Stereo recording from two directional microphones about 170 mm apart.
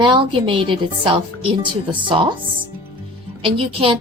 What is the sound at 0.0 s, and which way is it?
A woman's voice, 30° right (ahead or behind).